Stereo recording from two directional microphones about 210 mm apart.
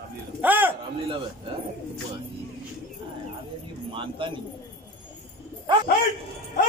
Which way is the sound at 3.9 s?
25° right (ahead or behind).